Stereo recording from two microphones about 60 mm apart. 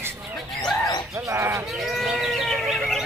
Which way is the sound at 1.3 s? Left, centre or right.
Right.